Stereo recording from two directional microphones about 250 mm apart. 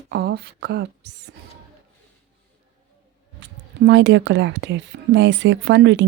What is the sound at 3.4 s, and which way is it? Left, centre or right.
Speech, right.